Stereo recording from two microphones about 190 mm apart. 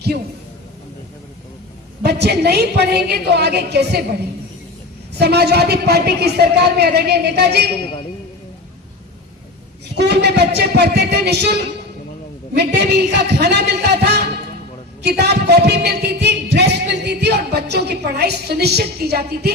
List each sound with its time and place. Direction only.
2.0 s a woman's voice: 60° right (ahead or behind)
5.2 s a woman's voice: 60° right (ahead or behind)
10.0 s a woman's voice: 60° right (ahead or behind)
12.5 s a woman's voice: 60° right (ahead or behind)